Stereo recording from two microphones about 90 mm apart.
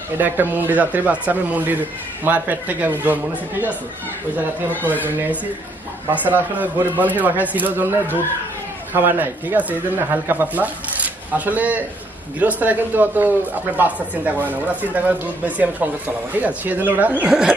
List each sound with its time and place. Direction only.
0.2 s a woman's voice: 20° right (ahead or behind)
5.0 s a man's voice: 20° right (ahead or behind)